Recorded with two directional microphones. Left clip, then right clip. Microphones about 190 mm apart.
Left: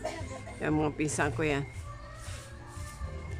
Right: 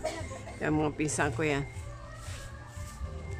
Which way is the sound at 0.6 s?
Centre (ahead or behind).